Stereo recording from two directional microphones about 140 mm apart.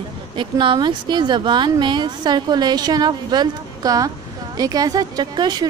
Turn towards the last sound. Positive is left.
turn(degrees=-30)  # may be behind; listen again after turning